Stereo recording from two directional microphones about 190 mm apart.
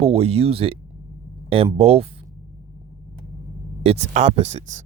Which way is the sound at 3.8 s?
35° right (ahead or behind).